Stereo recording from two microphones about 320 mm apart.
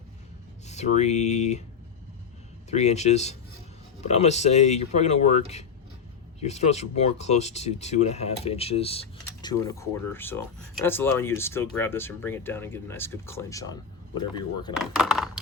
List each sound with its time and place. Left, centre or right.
0.7 s speech: left
2.6 s speech: left
14.8 s speech: centre